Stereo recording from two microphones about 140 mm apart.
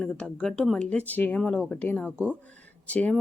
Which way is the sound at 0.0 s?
10° left (ahead or behind).